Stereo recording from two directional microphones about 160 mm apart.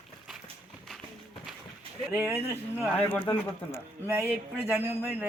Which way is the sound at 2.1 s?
10° right (ahead or behind).